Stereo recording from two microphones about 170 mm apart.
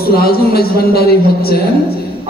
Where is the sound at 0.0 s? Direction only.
65° left (ahead or behind).